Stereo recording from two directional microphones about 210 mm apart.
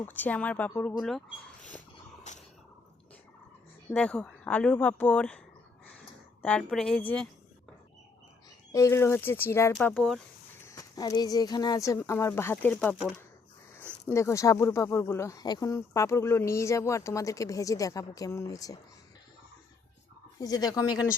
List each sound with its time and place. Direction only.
0.0 s speech: 10° left (ahead or behind)
2.3 s a sound: 35° left (ahead or behind)
3.9 s speech: 5° left (ahead or behind)
6.4 s a woman's voice: 5° left (ahead or behind)
8.7 s speech: 15° left (ahead or behind)
10.7 s speech: 15° left (ahead or behind)
14.1 s speech: 15° left (ahead or behind)
20.4 s speech: 15° left (ahead or behind)